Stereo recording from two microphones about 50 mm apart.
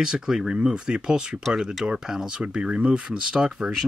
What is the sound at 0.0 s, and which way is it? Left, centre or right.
Speech, centre.